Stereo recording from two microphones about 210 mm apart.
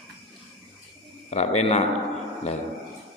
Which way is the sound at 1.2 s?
30° left (ahead or behind).